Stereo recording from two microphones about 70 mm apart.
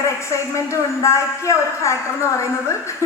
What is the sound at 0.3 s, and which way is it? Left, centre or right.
A woman's voice, left.